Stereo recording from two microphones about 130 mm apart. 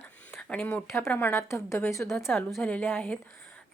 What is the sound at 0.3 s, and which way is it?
Speech, 10° left (ahead or behind).